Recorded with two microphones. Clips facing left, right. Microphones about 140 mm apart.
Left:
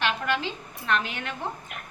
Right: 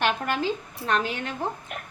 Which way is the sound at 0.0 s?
45° right (ahead or behind).